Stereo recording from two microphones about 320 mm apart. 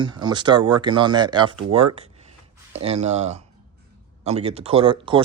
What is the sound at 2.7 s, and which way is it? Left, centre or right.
Speech, centre.